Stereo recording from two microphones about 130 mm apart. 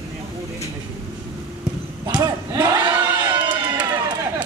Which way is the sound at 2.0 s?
30° right (ahead or behind).